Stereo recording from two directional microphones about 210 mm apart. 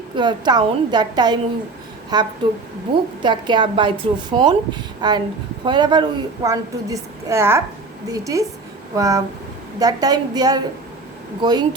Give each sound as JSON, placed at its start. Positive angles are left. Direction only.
{"t": 0.2, "sound": "a woman's voice", "side_deg": -20}